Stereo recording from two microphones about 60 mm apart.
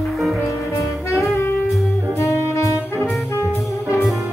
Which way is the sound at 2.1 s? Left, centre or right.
Left.